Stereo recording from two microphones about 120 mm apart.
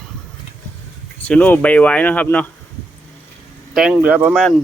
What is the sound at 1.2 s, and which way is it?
Speech, 15° left (ahead or behind).